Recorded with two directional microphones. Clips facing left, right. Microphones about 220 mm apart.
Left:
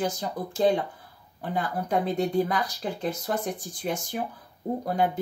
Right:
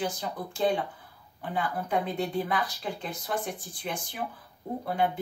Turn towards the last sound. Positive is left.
turn(degrees=40)  # may be behind; listen again after turning